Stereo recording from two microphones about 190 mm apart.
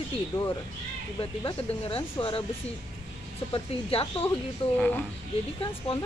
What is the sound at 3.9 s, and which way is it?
Speech, 25° left (ahead or behind).